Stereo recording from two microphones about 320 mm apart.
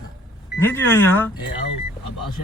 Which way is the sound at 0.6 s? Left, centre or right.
Centre.